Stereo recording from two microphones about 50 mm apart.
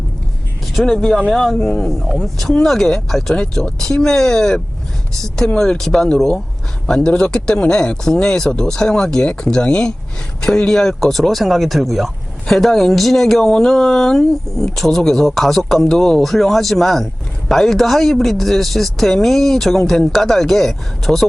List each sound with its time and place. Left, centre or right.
0.6 s vehicle: centre
0.9 s speech: centre